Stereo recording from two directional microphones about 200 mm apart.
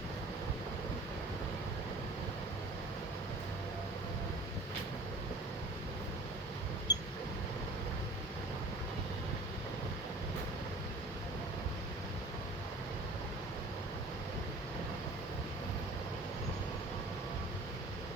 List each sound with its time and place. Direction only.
6.9 s vehicle: 55° left (ahead or behind)